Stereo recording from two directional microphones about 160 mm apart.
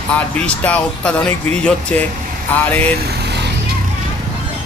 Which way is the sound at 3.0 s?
90° right.